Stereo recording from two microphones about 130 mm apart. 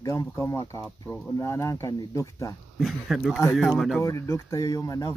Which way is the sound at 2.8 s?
Centre (ahead or behind).